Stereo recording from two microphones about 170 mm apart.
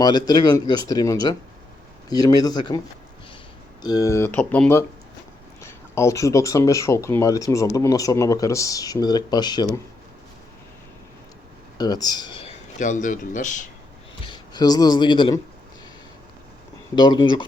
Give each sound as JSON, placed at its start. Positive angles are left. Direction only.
{"t": 0.0, "sound": "speech", "side_deg": 25}
{"t": 11.8, "sound": "speech", "side_deg": 25}
{"t": 12.8, "sound": "speech", "side_deg": 50}
{"t": 14.3, "sound": "speech", "side_deg": 25}
{"t": 16.9, "sound": "speech", "side_deg": 25}